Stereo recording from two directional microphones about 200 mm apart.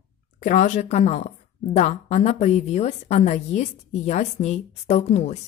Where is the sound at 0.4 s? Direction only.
40° left (ahead or behind).